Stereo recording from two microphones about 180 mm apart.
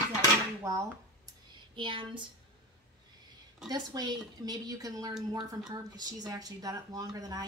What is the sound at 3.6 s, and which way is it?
Speech, 20° right (ahead or behind).